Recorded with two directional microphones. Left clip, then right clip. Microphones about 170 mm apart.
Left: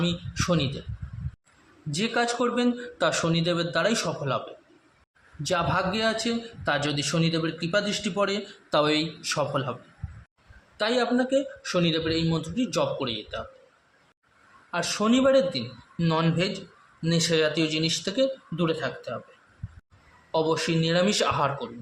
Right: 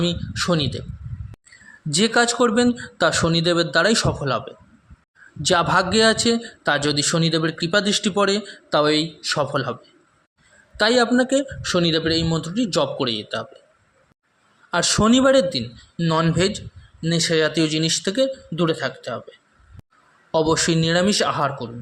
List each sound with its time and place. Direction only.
0.0 s a man's voice: 30° right (ahead or behind)
1.9 s a man's voice: 40° right (ahead or behind)
5.5 s a man's voice: 45° right (ahead or behind)
8.7 s speech: 25° right (ahead or behind)
10.8 s a man's voice: 35° right (ahead or behind)
14.7 s a man's voice: 40° right (ahead or behind)
16.0 s speech: 25° right (ahead or behind)
16.4 s a man's voice: 35° right (ahead or behind)
17.0 s a man's voice: 25° right (ahead or behind)
20.3 s a man's voice: 35° right (ahead or behind); by 21.7 s 20° right (ahead or behind)